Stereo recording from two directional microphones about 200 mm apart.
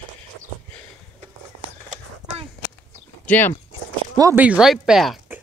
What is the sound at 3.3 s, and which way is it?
Speech, 10° left (ahead or behind).